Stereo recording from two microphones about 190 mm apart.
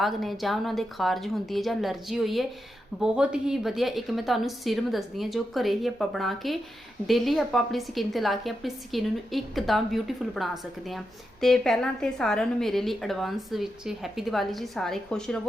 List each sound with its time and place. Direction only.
0.0 s a woman's voice: centre (ahead or behind)